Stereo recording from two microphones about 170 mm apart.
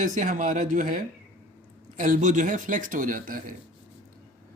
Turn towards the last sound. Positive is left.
turn(degrees=-55)  # may be behind; listen again after turning